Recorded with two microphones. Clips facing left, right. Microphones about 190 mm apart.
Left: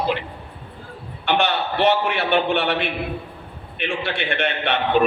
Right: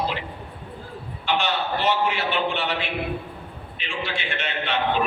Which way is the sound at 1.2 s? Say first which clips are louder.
Left 4 dB; 60° left (ahead or behind).